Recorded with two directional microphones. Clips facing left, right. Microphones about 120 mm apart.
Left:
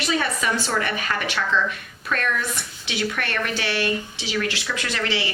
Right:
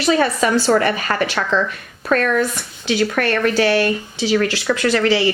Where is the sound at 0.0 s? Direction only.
40° right (ahead or behind).